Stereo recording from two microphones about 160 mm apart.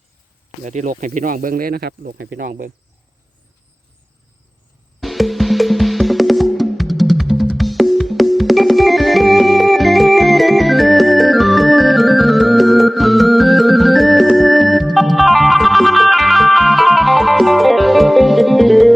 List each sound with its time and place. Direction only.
0.6 s speech: 50° right (ahead or behind); by 2.6 s 65° right (ahead or behind)
4.9 s music: centre (ahead or behind)